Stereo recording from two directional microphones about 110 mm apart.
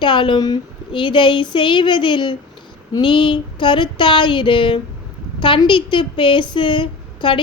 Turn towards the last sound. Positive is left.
turn(degrees=50)  # may be behind; listen again after turning